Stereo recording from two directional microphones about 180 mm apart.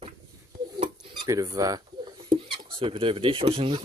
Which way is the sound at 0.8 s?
20° right (ahead or behind).